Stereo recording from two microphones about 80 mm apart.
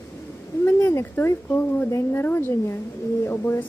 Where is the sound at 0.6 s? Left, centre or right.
Left.